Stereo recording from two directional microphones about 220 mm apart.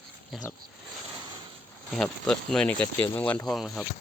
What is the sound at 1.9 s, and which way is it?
Speech, 5° left (ahead or behind).